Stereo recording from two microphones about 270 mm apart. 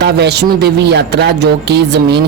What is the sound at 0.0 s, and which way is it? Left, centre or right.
Speech, right.